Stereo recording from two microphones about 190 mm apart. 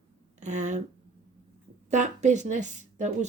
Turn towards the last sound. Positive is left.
turn(degrees=-40)  # may be behind; listen again after turning